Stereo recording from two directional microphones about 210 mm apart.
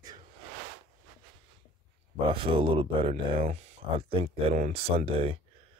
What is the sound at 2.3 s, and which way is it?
Speech, 25° right (ahead or behind).